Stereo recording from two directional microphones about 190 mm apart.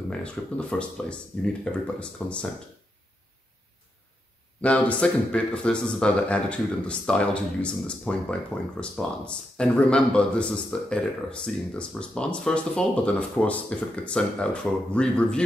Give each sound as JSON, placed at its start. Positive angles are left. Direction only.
{"t": 0.1, "sound": "speech", "side_deg": 5}
{"t": 4.6, "sound": "speech", "side_deg": 5}